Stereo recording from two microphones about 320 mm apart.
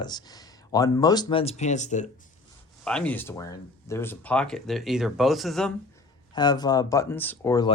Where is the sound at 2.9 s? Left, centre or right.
Centre.